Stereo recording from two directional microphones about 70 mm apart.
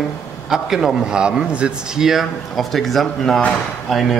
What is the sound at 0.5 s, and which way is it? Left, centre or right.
A man's voice, centre.